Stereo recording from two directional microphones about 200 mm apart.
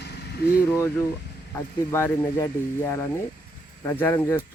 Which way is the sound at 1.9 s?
10° left (ahead or behind).